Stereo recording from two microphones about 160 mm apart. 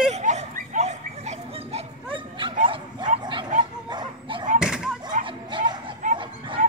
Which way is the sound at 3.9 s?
30° right (ahead or behind).